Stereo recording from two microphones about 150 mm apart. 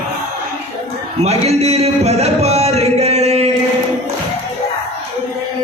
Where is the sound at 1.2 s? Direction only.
45° right (ahead or behind).